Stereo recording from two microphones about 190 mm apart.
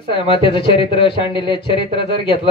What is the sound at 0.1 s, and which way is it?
Speech, 25° left (ahead or behind).